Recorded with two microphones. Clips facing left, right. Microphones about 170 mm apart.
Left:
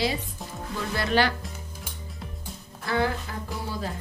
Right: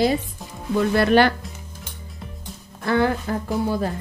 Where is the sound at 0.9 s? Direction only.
55° right (ahead or behind).